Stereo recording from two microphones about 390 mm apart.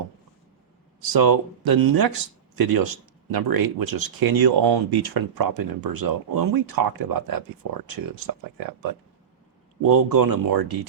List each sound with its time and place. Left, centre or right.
1.1 s speech: right